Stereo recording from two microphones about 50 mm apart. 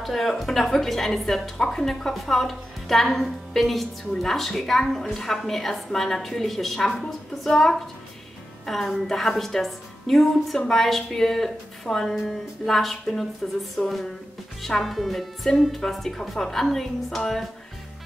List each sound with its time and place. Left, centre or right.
0.0 s a woman's voice: centre